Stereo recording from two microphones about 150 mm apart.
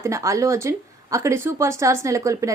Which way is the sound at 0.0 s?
20° right (ahead or behind).